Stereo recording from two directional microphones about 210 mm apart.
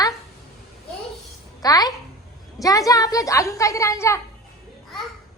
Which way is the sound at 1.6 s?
20° left (ahead or behind).